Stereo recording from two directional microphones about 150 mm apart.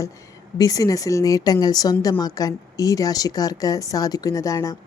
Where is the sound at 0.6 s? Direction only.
25° left (ahead or behind).